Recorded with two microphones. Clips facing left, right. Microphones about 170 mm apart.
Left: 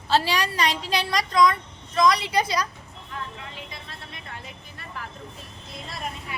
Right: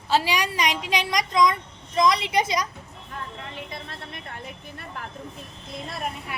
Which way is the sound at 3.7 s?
55° right (ahead or behind).